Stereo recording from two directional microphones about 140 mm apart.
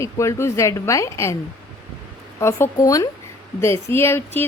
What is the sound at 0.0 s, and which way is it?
A woman's voice, 20° left (ahead or behind).